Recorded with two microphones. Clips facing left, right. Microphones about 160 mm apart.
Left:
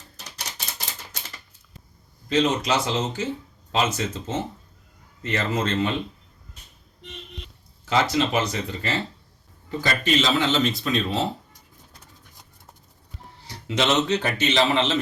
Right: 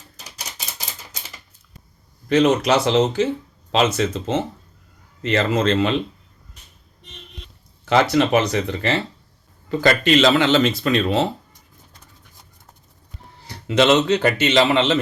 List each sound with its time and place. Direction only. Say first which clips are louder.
2.3 s a man's voice: right 6 dB; 65° right (ahead or behind); by 5.9 s 90° right
7.9 s speech: right 5 dB; 65° right (ahead or behind)
13.7 s speech: right 6 dB; 65° right (ahead or behind)